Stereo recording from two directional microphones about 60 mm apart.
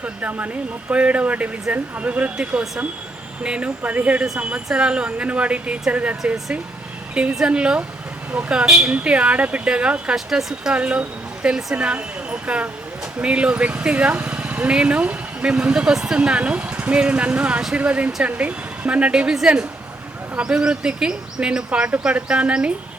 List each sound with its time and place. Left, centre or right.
0.0 s a woman's voice: right
10.2 s speech: centre
10.8 s speech: right